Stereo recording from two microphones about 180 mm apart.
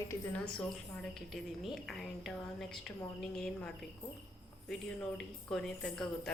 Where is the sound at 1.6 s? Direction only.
Centre (ahead or behind).